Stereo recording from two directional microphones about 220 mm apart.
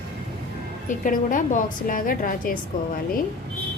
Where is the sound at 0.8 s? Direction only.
35° left (ahead or behind).